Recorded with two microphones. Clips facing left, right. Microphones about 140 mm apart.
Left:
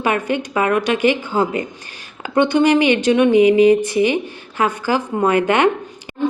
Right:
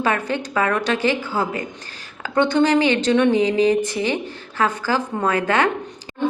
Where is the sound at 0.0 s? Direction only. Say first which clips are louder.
Left 3 dB; 15° left (ahead or behind).